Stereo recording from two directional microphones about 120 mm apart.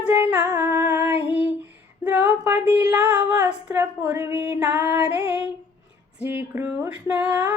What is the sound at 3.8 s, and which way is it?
Female singing, 20° right (ahead or behind).